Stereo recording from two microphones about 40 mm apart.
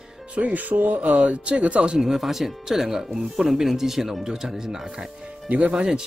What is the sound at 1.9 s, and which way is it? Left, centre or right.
Speech, centre.